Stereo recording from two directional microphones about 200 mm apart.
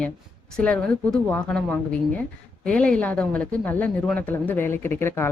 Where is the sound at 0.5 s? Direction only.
5° left (ahead or behind).